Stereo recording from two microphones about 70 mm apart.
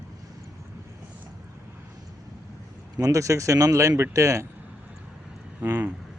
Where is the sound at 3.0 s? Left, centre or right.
Right.